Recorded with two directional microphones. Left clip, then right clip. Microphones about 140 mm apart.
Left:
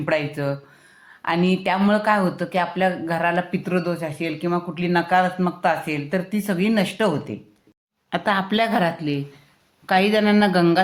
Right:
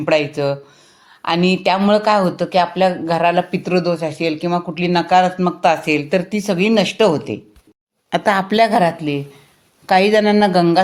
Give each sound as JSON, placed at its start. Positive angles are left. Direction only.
{"t": 0.0, "sound": "speech", "side_deg": -25}